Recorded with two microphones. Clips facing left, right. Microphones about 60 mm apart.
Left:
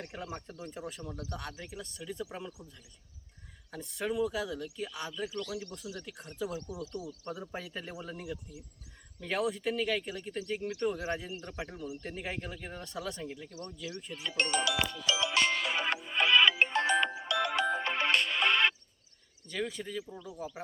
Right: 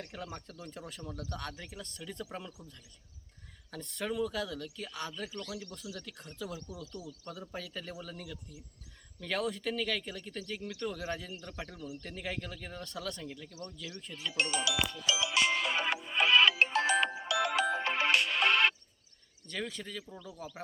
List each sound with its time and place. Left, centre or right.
0.0 s speech: left
3.7 s speech: centre
6.9 s speech: left
14.3 s speech: centre
15.0 s music: centre
19.5 s speech: centre